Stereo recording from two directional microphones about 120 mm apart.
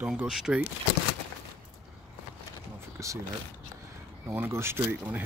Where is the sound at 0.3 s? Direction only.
Centre (ahead or behind).